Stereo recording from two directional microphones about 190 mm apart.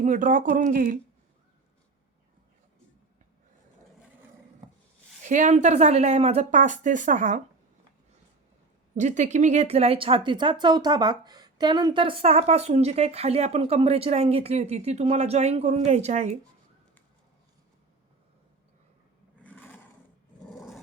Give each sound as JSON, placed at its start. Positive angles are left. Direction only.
{"t": 0.0, "sound": "speech", "side_deg": -40}
{"t": 5.2, "sound": "speech", "side_deg": -40}
{"t": 9.0, "sound": "speech", "side_deg": -40}
{"t": 19.4, "sound": "roar", "side_deg": 10}